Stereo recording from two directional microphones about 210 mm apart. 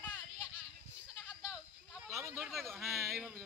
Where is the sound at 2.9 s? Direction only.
10° right (ahead or behind).